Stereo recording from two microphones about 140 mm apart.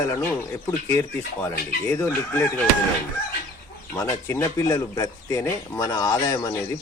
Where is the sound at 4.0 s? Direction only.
20° left (ahead or behind).